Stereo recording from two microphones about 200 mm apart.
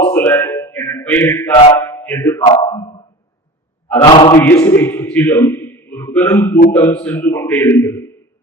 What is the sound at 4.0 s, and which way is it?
Chant, 25° left (ahead or behind).